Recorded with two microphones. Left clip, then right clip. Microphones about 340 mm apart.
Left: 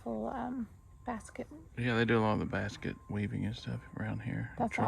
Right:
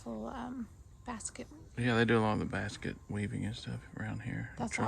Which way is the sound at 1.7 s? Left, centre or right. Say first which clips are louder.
Right 1 dB; centre.